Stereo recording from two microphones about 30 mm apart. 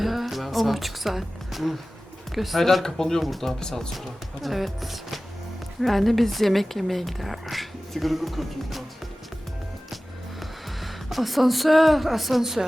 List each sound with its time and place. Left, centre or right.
0.0 s a woman's voice: centre
2.6 s speech: centre
2.8 s speech: centre
3.2 s speech: centre
3.6 s speech: centre
4.4 s speech: centre
10.4 s speech: centre